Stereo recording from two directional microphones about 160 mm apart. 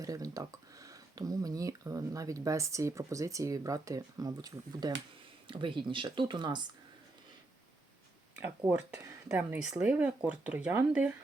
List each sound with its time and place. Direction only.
0.0 s speech: 20° right (ahead or behind)
8.4 s speech: 10° right (ahead or behind)